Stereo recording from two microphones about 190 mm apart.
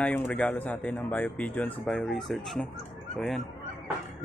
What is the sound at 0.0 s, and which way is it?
Speech, 5° left (ahead or behind).